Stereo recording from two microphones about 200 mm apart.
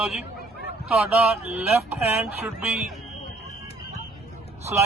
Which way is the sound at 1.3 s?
5° right (ahead or behind).